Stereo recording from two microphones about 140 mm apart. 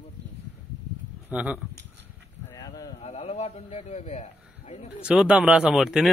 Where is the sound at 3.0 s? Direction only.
50° left (ahead or behind).